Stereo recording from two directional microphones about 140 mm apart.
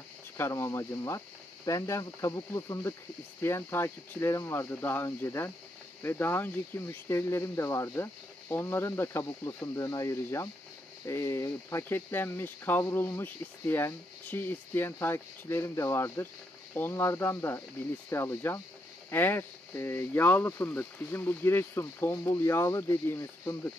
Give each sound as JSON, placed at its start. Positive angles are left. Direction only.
{"t": 0.4, "sound": "speech", "side_deg": 20}